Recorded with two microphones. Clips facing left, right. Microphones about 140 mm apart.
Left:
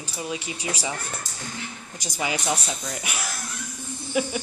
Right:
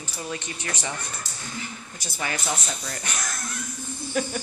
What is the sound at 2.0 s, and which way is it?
Speech, 15° left (ahead or behind).